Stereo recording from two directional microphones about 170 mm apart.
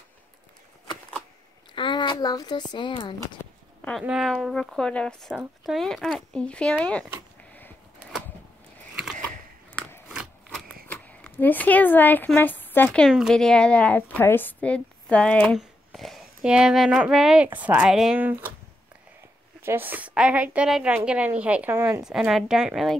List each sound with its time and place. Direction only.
1.8 s a sound: 25° left (ahead or behind)
2.7 s speech: 25° left (ahead or behind)
4.0 s a woman's voice: centre (ahead or behind)
5.3 s a woman's voice: 5° right (ahead or behind)
9.7 s scissors: 15° left (ahead or behind)
10.0 s scissors: 5° right (ahead or behind)
10.9 s speech: 10° left (ahead or behind)
13.0 s a woman's voice: centre (ahead or behind)
19.6 s a woman's voice: 10° right (ahead or behind)
22.0 s a woman's voice: centre (ahead or behind)